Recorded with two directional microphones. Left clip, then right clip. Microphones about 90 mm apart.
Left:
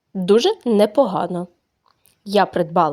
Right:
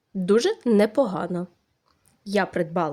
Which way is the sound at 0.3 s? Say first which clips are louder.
Left 5 dB; 20° left (ahead or behind).